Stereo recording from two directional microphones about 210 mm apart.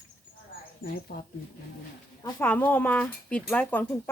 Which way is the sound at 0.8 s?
45° left (ahead or behind).